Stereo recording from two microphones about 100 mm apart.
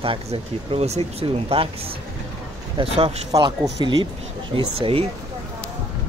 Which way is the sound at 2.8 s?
70° right (ahead or behind).